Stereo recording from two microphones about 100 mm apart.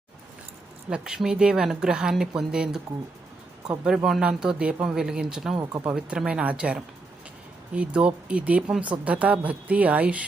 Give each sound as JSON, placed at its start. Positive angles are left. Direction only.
{"t": 0.9, "sound": "speech", "side_deg": -5}
{"t": 5.5, "sound": "speech", "side_deg": -40}
{"t": 5.9, "sound": "speech", "side_deg": -10}